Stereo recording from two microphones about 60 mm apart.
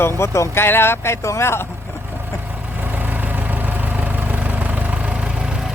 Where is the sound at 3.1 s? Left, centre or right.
Right.